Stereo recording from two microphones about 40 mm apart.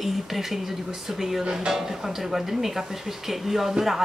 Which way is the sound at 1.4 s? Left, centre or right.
Right.